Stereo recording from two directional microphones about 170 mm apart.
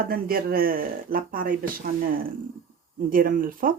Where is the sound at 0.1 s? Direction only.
60° right (ahead or behind).